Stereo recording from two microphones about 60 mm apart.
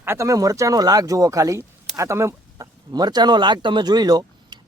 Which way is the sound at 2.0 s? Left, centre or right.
Right.